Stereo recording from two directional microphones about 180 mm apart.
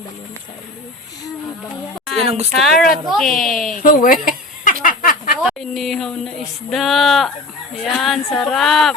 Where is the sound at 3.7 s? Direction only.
50° left (ahead or behind).